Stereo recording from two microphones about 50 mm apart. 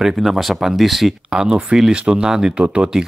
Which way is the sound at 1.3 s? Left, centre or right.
Centre.